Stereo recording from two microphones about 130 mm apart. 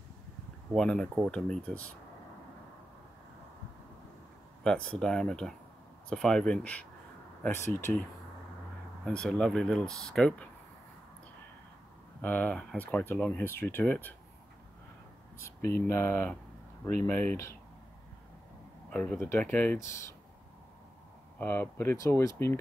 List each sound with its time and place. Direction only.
0.7 s speech: 5° left (ahead or behind)
4.6 s speech: 10° left (ahead or behind)
9.0 s speech: 5° left (ahead or behind)
12.2 s speech: 15° left (ahead or behind)
15.3 s speech: 20° left (ahead or behind)
17.3 s speech: 20° left (ahead or behind)
18.9 s speech: 10° left (ahead or behind)
21.4 s speech: 15° left (ahead or behind)